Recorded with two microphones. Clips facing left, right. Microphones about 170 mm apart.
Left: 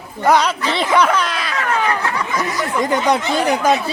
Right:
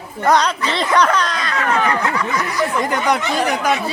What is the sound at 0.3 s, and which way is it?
Speech, 5° left (ahead or behind).